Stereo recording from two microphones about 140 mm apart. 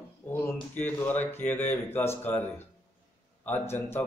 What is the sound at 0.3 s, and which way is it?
Speech, 15° left (ahead or behind).